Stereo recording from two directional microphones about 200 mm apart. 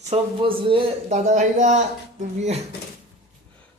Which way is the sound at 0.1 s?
25° right (ahead or behind).